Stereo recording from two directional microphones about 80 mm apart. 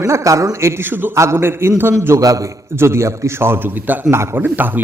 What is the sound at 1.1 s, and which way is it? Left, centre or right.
A man's voice, right.